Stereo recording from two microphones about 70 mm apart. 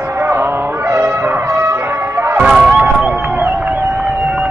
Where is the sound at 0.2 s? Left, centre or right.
Right.